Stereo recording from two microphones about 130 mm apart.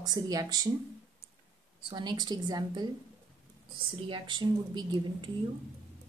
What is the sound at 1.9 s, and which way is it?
Speech, 35° right (ahead or behind).